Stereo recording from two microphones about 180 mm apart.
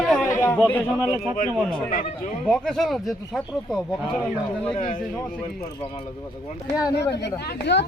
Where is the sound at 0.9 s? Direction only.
10° right (ahead or behind).